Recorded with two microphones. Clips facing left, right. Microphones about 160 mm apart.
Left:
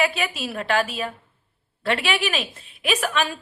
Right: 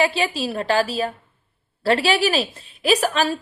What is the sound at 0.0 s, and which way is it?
A woman's voice, 30° right (ahead or behind).